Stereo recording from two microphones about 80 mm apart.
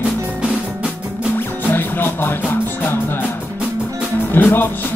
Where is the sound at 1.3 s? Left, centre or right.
Left.